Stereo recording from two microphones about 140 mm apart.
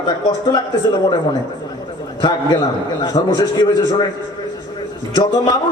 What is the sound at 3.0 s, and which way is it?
Speech, 30° left (ahead or behind).